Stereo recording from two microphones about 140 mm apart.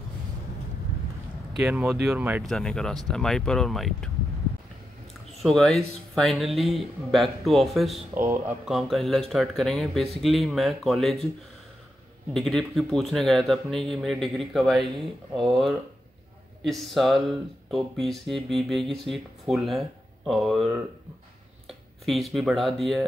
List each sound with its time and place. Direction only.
1.6 s speech: 5° right (ahead or behind)
2.4 s speech: 5° left (ahead or behind)
5.4 s speech: centre (ahead or behind)
8.2 s speech: 15° right (ahead or behind)
8.6 s speech: centre (ahead or behind)
12.4 s speech: centre (ahead or behind)
21.6 s speech: centre (ahead or behind)